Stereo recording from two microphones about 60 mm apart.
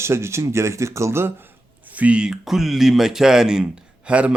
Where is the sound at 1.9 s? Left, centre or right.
Right.